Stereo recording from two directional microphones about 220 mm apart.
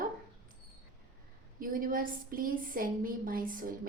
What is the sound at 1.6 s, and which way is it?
A woman's voice, 40° right (ahead or behind).